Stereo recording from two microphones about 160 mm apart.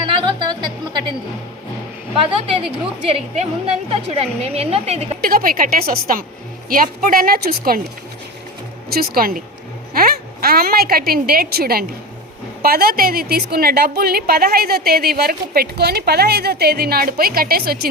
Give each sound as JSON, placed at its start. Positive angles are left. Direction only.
{"t": 0.0, "sound": "music", "side_deg": -30}
{"t": 2.1, "sound": "a woman's voice", "side_deg": -35}
{"t": 5.2, "sound": "a woman's voice", "side_deg": -60}
{"t": 8.9, "sound": "a woman's voice", "side_deg": -70}